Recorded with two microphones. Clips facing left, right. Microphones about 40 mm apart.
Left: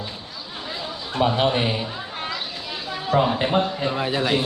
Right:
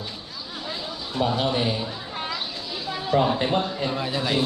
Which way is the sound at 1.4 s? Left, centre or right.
Left.